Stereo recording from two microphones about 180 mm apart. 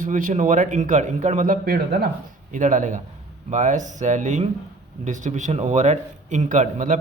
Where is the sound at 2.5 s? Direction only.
45° right (ahead or behind).